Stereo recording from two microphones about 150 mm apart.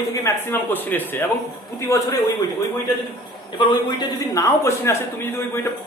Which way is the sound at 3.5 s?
30° left (ahead or behind).